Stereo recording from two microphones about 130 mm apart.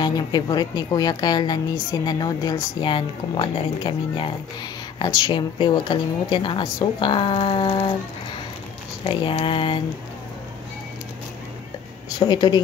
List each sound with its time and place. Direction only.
0.0 s a woman's voice: 35° left (ahead or behind)
9.0 s a woman's voice: 40° left (ahead or behind)
12.2 s a woman's voice: 35° left (ahead or behind)